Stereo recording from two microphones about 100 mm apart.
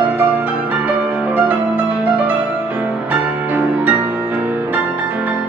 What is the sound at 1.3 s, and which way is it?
Music, 15° right (ahead or behind).